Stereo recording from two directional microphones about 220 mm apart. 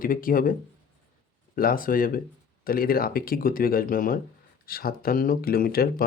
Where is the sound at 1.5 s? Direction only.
40° left (ahead or behind).